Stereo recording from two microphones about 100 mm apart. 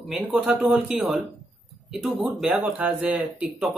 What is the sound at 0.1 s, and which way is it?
Speech, 10° right (ahead or behind).